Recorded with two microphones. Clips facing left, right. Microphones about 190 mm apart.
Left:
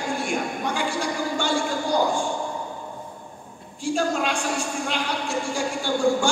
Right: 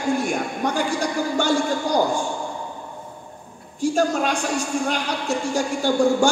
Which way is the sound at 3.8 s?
40° right (ahead or behind).